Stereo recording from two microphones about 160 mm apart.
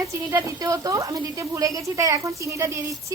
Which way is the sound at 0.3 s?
20° right (ahead or behind).